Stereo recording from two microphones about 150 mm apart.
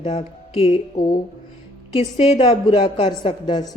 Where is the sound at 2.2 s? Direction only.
40° left (ahead or behind).